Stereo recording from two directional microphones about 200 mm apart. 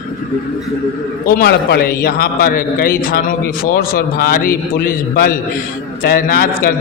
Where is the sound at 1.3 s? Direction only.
50° left (ahead or behind).